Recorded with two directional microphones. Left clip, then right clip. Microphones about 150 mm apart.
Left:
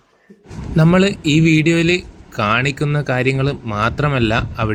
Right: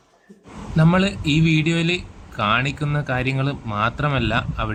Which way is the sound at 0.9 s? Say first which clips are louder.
Left 7 dB; 20° left (ahead or behind).